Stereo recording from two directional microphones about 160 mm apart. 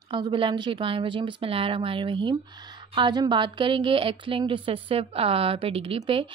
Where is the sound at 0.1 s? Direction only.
30° right (ahead or behind).